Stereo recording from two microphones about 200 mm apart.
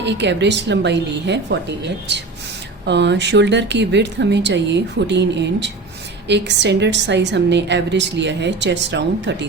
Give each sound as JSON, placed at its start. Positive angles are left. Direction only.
{"t": 0.0, "sound": "a woman's voice", "side_deg": -60}